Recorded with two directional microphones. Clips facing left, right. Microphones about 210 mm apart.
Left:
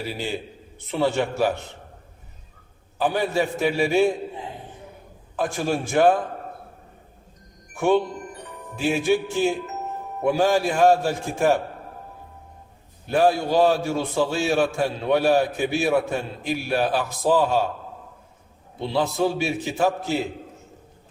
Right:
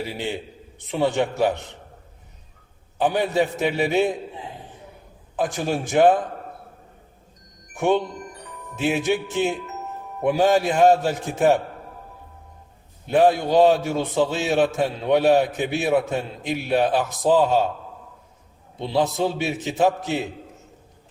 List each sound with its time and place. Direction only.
0.9 s a man's voice: 15° right (ahead or behind)
3.0 s a man's voice: 20° right (ahead or behind)
5.8 s a man's voice: 20° right (ahead or behind)
7.7 s a man's voice: 20° right (ahead or behind)
13.1 s a man's voice: 20° right (ahead or behind)
18.8 s a man's voice: 20° right (ahead or behind)